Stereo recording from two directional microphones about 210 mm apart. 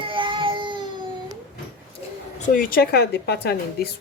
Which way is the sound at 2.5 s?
40° left (ahead or behind).